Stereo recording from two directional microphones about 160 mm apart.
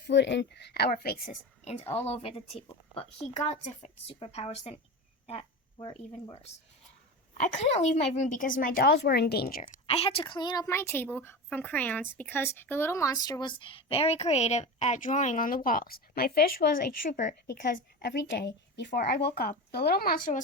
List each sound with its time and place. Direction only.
0.1 s a woman's voice: 90° left; by 1.2 s 70° left (ahead or behind)
1.3 s a woman's voice: 45° left (ahead or behind); by 9.8 s 60° left (ahead or behind)
9.8 s a woman's voice: 40° left (ahead or behind); by 18.9 s 90° left
18.9 s speech: 80° left; by 20.4 s 60° left (ahead or behind)